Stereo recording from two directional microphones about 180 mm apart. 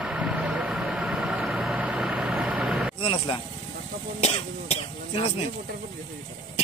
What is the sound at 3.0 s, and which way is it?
Speech, 30° left (ahead or behind).